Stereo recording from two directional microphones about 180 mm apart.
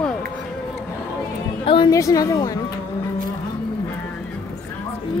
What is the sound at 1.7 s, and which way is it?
Speech, 20° left (ahead or behind).